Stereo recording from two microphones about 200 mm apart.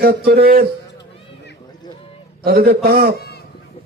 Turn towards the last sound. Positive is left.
turn(degrees=55)  # may be behind; listen again after turning